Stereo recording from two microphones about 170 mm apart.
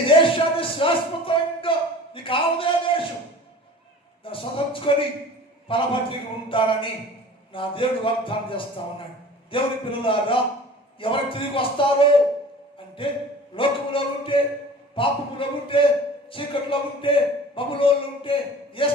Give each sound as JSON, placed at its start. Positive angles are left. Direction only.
{"t": 0.2, "sound": "a sound", "side_deg": 30}
{"t": 2.1, "sound": "a man's voice", "side_deg": 30}
{"t": 4.2, "sound": "a man's voice", "side_deg": 30}